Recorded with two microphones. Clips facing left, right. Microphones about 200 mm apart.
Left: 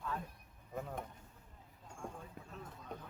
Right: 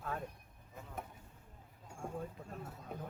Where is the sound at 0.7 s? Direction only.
60° left (ahead or behind).